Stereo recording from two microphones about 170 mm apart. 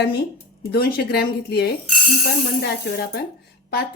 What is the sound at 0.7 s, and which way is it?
Speech, 65° left (ahead or behind).